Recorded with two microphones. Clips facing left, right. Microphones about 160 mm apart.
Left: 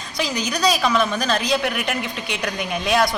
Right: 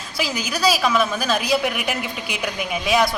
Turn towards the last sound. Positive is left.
turn(degrees=0)  # may be behind; listen again after turning